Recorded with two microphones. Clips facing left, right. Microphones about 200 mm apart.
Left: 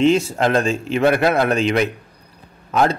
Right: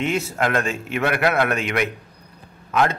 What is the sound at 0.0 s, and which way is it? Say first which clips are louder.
A man's voice: left 7 dB; 30° left (ahead or behind).